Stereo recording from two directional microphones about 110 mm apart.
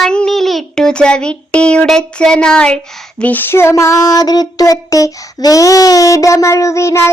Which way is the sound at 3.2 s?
15° left (ahead or behind).